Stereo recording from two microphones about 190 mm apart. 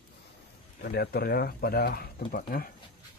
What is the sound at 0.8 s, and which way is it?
Speech, 55° left (ahead or behind).